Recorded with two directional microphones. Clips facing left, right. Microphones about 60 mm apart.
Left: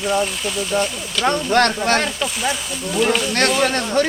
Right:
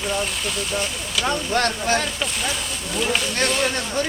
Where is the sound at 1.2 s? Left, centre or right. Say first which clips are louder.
Left 6 dB; left.